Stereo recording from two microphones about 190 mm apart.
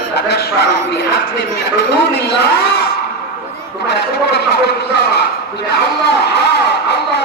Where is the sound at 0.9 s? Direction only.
60° left (ahead or behind).